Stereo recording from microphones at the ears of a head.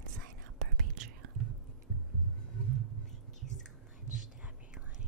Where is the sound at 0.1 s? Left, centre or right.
Right.